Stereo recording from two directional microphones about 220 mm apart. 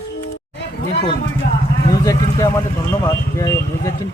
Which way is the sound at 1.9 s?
15° left (ahead or behind).